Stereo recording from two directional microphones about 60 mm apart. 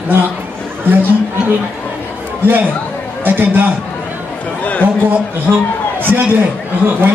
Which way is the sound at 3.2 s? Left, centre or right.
Right.